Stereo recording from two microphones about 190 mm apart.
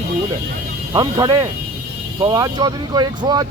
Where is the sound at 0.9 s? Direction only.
20° right (ahead or behind).